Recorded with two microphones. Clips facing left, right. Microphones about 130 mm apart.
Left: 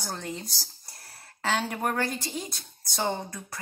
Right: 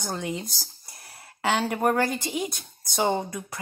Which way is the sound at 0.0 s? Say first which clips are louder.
Right 5 dB; 10° right (ahead or behind).